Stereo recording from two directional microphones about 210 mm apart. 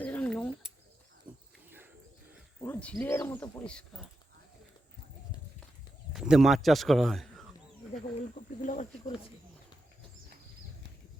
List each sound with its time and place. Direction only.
0.0 s a sound: 5° left (ahead or behind)
2.6 s speech: 5° left (ahead or behind)
6.1 s speech: centre (ahead or behind)
7.9 s speech: 35° left (ahead or behind)